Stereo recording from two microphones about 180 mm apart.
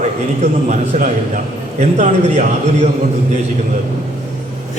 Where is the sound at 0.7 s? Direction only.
45° right (ahead or behind).